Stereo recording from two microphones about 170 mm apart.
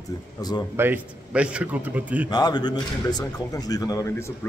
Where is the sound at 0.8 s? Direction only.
10° right (ahead or behind).